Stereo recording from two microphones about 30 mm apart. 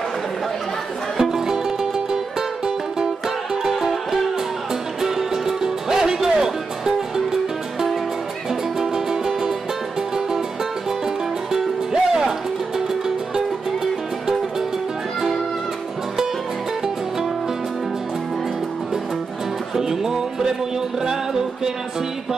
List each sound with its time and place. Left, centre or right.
1.1 s music: centre
5.0 s music: centre
8.7 s music: centre
11.9 s music: centre
19.7 s music: centre